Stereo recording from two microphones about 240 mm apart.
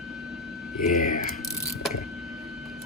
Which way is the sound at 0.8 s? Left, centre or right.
Left.